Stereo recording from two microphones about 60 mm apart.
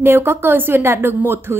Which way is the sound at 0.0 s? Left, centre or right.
Right.